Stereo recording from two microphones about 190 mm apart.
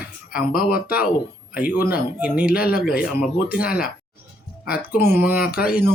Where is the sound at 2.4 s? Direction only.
50° left (ahead or behind).